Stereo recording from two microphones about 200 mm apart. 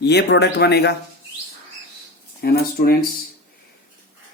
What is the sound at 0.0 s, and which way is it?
Speech, 55° left (ahead or behind).